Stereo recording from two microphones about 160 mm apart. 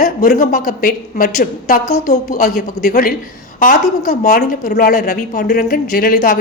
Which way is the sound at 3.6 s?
55° left (ahead or behind).